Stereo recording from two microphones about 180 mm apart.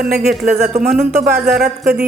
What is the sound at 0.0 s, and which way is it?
Speech, 60° right (ahead or behind).